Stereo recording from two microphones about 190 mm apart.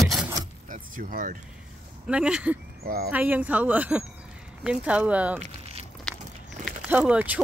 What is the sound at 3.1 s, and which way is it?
Speech, 10° right (ahead or behind).